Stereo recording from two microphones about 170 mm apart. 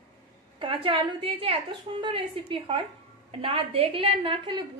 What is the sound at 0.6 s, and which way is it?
A woman's voice, 30° right (ahead or behind).